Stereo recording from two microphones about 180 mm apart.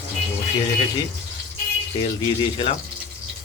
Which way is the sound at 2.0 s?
25° left (ahead or behind).